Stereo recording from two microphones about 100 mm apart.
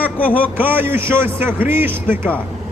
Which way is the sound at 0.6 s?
20° right (ahead or behind).